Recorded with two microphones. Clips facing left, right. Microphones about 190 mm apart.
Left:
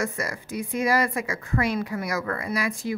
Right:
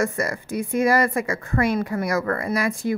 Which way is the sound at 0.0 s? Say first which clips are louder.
Right 5 dB; 50° right (ahead or behind).